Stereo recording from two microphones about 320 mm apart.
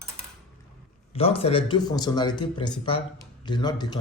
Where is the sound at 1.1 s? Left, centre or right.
Centre.